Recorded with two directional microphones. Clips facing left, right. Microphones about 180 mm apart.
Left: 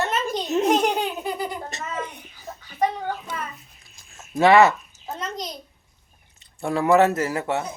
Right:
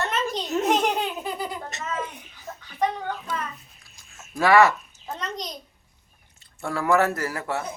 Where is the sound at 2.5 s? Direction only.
15° left (ahead or behind).